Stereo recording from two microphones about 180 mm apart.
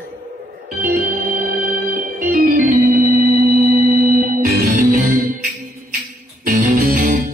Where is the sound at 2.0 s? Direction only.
50° right (ahead or behind).